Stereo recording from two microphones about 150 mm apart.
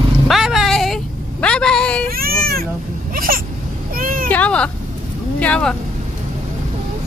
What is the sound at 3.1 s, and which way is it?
Hiccup, 75° right (ahead or behind).